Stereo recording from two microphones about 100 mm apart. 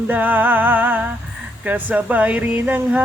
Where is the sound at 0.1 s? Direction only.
20° right (ahead or behind).